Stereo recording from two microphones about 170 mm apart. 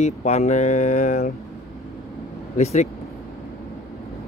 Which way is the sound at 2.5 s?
40° left (ahead or behind).